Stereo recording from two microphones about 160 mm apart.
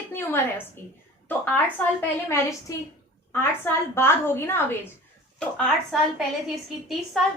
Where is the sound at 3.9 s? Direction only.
15° left (ahead or behind).